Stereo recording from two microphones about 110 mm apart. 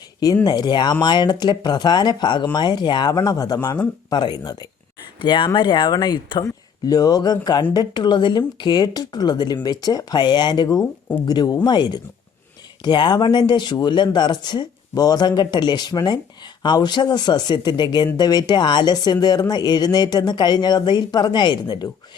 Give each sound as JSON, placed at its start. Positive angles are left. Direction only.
{"t": 0.4, "sound": "speech", "side_deg": 40}